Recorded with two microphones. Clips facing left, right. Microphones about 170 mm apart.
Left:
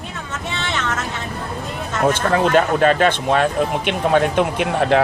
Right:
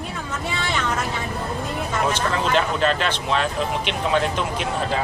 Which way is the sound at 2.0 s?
55° left (ahead or behind).